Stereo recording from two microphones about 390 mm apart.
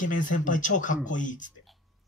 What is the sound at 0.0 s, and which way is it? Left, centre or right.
Speech, centre.